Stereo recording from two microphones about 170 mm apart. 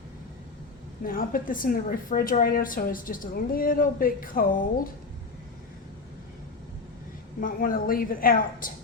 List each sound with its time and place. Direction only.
1.0 s a woman's voice: 55° left (ahead or behind)
7.4 s a woman's voice: 55° left (ahead or behind)